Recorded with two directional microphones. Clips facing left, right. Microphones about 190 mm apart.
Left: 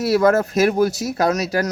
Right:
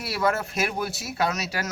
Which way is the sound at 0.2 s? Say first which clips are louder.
Left 6 dB; 45° left (ahead or behind).